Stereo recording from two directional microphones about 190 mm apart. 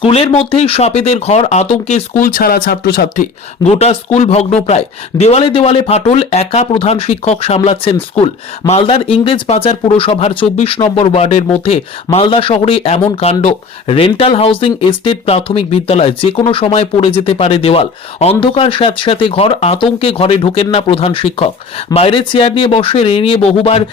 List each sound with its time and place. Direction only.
0.0 s speech: 30° left (ahead or behind); by 3.2 s 55° left (ahead or behind)
3.6 s speech: 35° left (ahead or behind)